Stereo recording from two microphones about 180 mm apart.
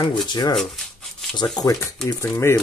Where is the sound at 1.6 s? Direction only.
15° left (ahead or behind).